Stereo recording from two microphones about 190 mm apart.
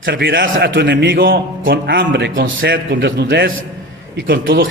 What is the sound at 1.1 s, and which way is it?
A man's voice, 50° right (ahead or behind).